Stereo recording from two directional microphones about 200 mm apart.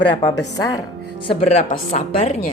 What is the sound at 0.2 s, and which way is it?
A woman's voice, 20° left (ahead or behind).